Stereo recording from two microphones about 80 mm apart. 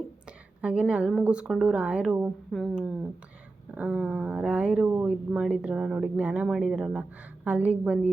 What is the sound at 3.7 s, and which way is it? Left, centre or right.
Speech, centre.